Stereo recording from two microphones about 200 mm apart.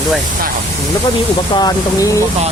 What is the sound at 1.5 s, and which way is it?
Speech, 20° left (ahead or behind).